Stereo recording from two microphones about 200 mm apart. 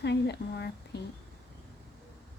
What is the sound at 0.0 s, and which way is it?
A woman's voice, 55° left (ahead or behind).